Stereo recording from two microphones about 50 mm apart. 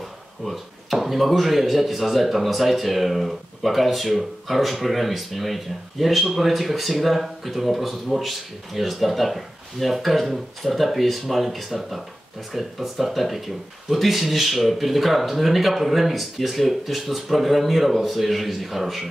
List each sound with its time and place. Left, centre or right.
0.5 s speech: centre